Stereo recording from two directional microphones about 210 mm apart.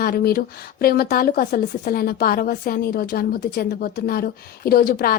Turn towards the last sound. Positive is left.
turn(degrees=45)  # may be behind; listen again after turning